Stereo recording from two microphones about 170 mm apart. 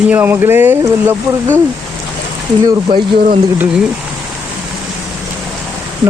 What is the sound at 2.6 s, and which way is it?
Speech, 30° right (ahead or behind).